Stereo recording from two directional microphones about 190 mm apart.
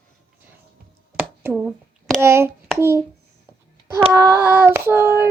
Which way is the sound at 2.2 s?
15° right (ahead or behind).